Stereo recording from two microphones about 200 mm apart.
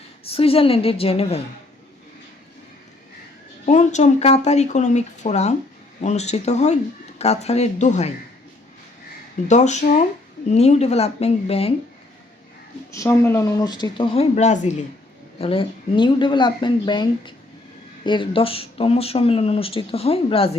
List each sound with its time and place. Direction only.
0.3 s speech: 30° left (ahead or behind)
3.7 s speech: 35° left (ahead or behind)
9.5 s speech: 35° left (ahead or behind)
12.9 s speech: 15° left (ahead or behind); by 20.6 s 30° left (ahead or behind)